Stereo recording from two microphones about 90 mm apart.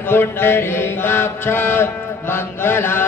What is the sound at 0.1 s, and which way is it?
Mantra, 25° left (ahead or behind).